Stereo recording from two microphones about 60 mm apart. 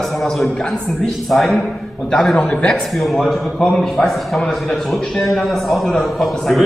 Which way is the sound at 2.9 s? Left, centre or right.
Centre.